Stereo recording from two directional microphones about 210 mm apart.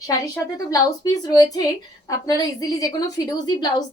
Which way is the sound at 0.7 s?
15° left (ahead or behind).